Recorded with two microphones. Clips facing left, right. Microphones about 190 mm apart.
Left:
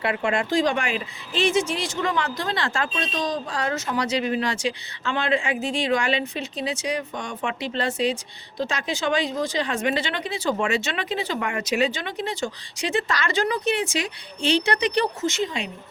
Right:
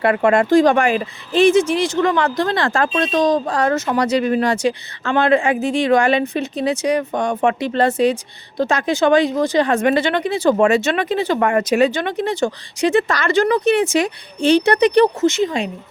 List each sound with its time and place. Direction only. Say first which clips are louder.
0.0 s speech: right 9 dB; 50° right (ahead or behind)